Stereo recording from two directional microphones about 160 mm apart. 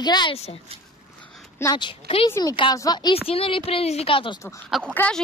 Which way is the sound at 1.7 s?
30° left (ahead or behind).